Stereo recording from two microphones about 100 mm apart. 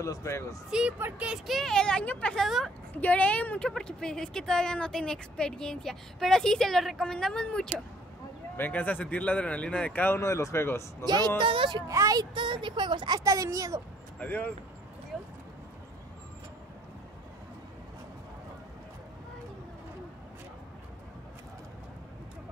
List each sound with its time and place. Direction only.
0.0 s speech: 30° left (ahead or behind)
0.7 s speech: 10° right (ahead or behind)
0.9 s speech: 20° right (ahead or behind)
1.3 s speech: centre (ahead or behind)
2.4 s speech: centre (ahead or behind)
3.0 s speech: 15° left (ahead or behind)
11.1 s a woman's voice: 45° right (ahead or behind)
11.9 s speech: 30° right (ahead or behind)
12.2 s a woman's voice: 55° right (ahead or behind); by 13.7 s 30° right (ahead or behind)
14.2 s speech: 15° left (ahead or behind)
15.1 s a sound: 5° right (ahead or behind)